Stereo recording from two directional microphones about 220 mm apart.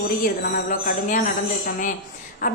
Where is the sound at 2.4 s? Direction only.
35° left (ahead or behind).